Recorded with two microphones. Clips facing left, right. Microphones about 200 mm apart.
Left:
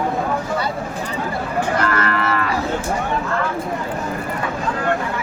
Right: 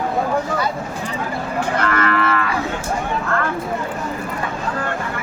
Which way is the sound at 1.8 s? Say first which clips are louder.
Right 1 dB; 35° left (ahead or behind).